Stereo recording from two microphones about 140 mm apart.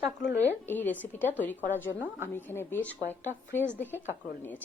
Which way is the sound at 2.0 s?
15° right (ahead or behind).